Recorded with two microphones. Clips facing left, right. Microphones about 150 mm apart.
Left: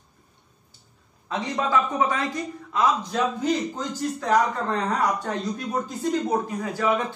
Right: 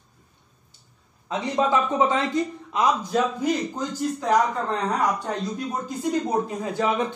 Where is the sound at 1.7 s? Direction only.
25° right (ahead or behind).